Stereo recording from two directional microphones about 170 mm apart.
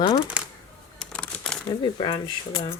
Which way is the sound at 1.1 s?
5° left (ahead or behind).